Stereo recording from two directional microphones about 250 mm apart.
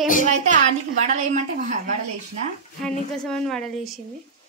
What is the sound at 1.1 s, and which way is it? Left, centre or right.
Speech, right.